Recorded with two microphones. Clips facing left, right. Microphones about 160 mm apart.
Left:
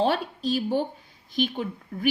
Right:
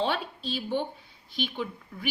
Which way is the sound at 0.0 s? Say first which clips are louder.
Left 5 dB; 45° left (ahead or behind).